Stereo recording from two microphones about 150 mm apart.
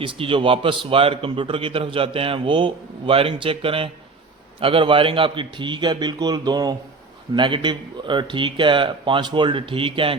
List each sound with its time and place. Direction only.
0.0 s a man's voice: 35° right (ahead or behind)